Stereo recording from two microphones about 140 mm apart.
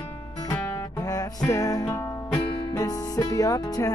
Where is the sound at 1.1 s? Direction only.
25° left (ahead or behind).